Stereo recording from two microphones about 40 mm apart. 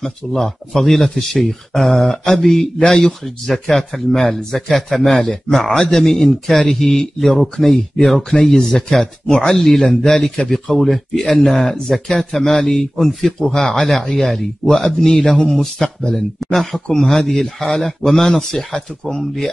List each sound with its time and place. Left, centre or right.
0.0 s speech: centre
5.2 s speech: centre
8.5 s speech: centre
13.8 s speech: centre